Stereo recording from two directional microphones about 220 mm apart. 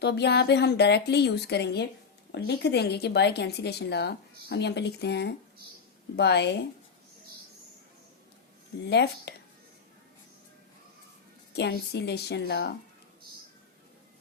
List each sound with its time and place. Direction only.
0.0 s speech: 50° left (ahead or behind)
8.9 s speech: 50° left (ahead or behind)
11.5 s speech: 50° left (ahead or behind)